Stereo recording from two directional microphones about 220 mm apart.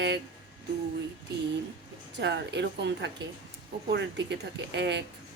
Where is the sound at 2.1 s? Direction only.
50° right (ahead or behind).